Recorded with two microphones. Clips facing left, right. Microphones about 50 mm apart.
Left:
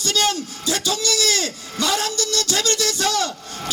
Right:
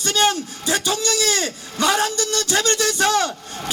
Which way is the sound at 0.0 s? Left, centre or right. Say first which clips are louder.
Right 2 dB; right.